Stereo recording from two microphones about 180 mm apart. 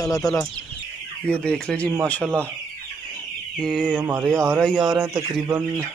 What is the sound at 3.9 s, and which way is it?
Speech, 10° right (ahead or behind).